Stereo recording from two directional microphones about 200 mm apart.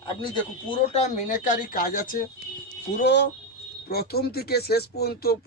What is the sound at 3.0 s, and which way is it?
A man's voice, 60° left (ahead or behind).